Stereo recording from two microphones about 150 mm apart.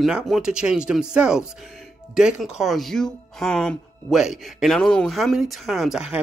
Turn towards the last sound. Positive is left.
turn(degrees=-5)  # may be behind; listen again after turning